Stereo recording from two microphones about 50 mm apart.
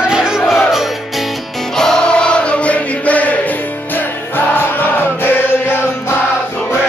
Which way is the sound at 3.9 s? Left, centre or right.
Left.